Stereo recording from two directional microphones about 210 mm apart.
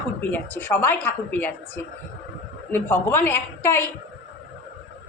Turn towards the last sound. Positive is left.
turn(degrees=10)  # may be behind; listen again after turning